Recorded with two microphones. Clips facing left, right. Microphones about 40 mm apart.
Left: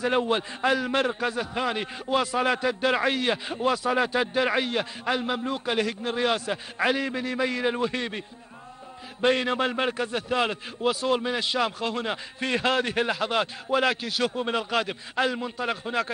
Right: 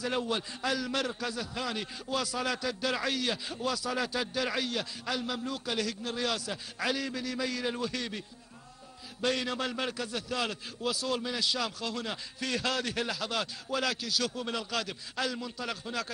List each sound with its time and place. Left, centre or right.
0.0 s a man's voice: left
9.2 s a man's voice: left